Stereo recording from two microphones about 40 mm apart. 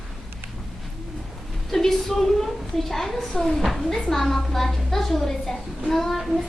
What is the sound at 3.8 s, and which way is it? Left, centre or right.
A woman's voice, centre.